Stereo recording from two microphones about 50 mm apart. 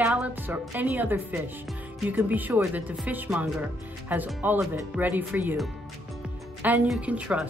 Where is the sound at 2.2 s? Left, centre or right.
Right.